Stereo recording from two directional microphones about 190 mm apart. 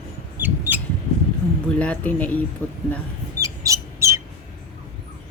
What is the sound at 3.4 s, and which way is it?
Mouse, 15° right (ahead or behind).